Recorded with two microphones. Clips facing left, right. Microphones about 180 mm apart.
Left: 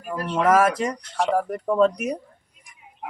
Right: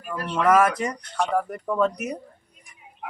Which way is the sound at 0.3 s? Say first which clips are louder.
Left 1 dB; 25° left (ahead or behind).